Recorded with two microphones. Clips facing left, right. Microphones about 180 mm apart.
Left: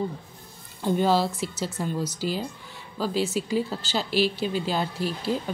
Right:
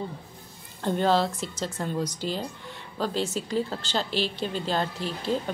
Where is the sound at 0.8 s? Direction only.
5° left (ahead or behind).